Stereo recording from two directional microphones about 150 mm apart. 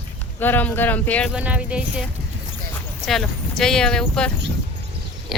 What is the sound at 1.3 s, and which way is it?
Speech, 10° right (ahead or behind).